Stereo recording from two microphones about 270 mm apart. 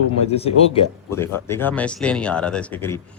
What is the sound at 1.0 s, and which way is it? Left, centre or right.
Speech, centre.